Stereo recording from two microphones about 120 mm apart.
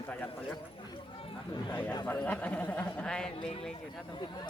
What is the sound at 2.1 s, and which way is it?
Speech, 15° left (ahead or behind).